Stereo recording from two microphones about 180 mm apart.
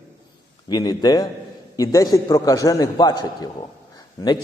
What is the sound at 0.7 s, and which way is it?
A man's voice, 20° left (ahead or behind).